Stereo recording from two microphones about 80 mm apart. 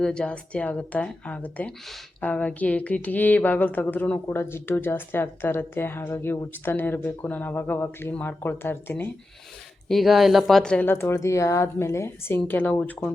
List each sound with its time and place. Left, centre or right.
0.0 s speech: centre; by 9.0 s left
9.9 s speech: centre
10.6 s speech: centre
10.8 s a woman's voice: left